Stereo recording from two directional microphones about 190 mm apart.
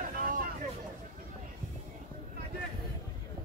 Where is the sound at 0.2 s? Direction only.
50° right (ahead or behind).